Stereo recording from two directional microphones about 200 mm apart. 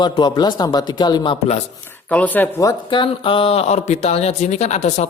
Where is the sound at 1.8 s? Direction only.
10° left (ahead or behind).